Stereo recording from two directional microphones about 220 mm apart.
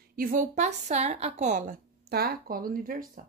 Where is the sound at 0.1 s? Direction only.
40° right (ahead or behind).